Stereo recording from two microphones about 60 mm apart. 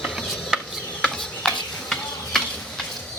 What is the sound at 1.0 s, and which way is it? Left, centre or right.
Stir, centre.